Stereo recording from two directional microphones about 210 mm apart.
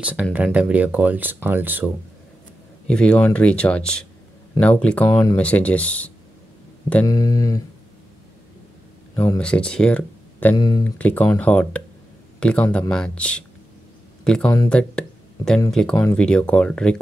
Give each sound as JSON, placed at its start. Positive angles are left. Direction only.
{"t": 0.0, "sound": "speech", "side_deg": -5}
{"t": 2.9, "sound": "speech", "side_deg": 5}
{"t": 7.1, "sound": "speech", "side_deg": 20}
{"t": 9.1, "sound": "speech", "side_deg": 10}
{"t": 10.5, "sound": "speech", "side_deg": 20}
{"t": 11.0, "sound": "speech", "side_deg": 5}
{"t": 12.6, "sound": "speech", "side_deg": 15}
{"t": 12.9, "sound": "speech", "side_deg": 5}